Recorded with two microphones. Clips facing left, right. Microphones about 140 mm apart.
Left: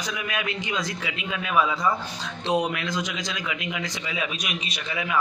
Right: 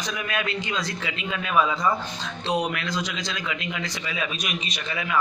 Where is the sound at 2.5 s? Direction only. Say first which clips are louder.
Left 1 dB; 20° left (ahead or behind); by 5.0 s 5° left (ahead or behind).